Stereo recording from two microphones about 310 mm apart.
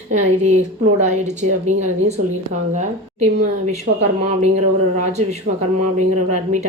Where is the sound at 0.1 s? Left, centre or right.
Right.